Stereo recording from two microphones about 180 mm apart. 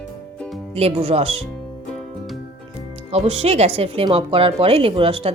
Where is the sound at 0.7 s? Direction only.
35° right (ahead or behind).